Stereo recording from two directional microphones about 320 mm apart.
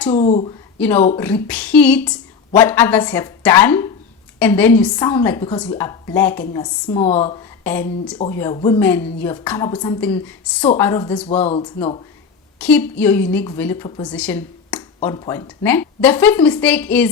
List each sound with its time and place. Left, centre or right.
0.1 s speech: left
0.8 s a woman's voice: centre
7.6 s a woman's voice: centre
11.3 s speech: centre
12.5 s speech: centre